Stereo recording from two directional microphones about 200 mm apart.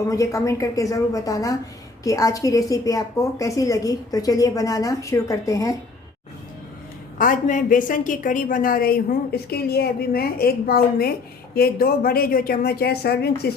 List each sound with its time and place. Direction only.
0.1 s a woman's voice: 15° left (ahead or behind)
7.2 s a woman's voice: 40° left (ahead or behind)